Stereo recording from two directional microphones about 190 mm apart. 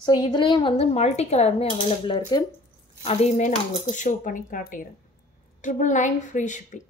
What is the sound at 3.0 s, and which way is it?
Cutlery, 35° left (ahead or behind).